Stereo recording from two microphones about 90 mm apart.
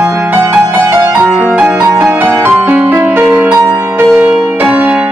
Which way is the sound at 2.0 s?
20° right (ahead or behind).